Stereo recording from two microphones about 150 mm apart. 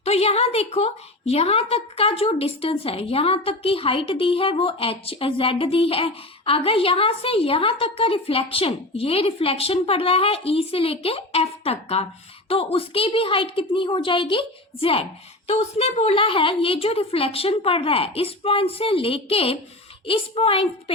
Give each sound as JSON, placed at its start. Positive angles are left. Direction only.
{"t": 0.0, "sound": "a woman's voice", "side_deg": 45}